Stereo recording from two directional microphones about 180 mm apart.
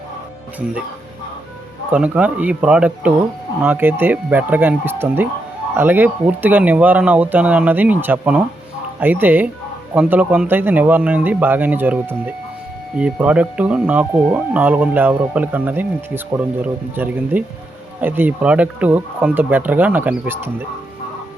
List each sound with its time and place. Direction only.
1.9 s speech: 10° right (ahead or behind)